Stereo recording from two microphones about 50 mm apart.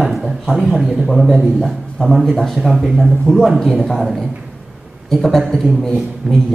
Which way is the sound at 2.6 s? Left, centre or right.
Centre.